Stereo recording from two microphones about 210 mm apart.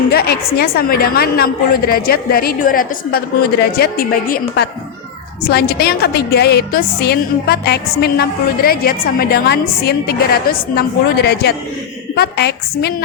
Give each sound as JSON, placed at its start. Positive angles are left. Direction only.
{"t": 0.1, "sound": "a woman's voice", "side_deg": 50}